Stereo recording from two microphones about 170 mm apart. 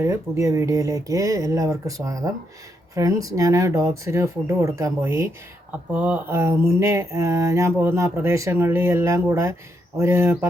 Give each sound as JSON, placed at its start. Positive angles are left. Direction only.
{"t": 0.0, "sound": "speech", "side_deg": -15}
{"t": 5.9, "sound": "mantra", "side_deg": -10}